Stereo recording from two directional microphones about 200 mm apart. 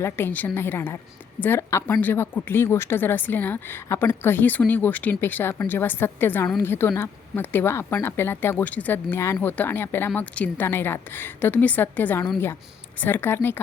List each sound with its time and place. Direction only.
0.0 s speech: 10° left (ahead or behind)